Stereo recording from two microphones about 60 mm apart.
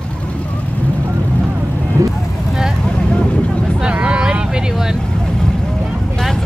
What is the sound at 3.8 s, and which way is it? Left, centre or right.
Vehicle, centre.